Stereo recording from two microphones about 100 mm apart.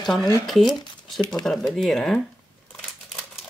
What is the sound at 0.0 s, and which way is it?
Speech, centre (ahead or behind).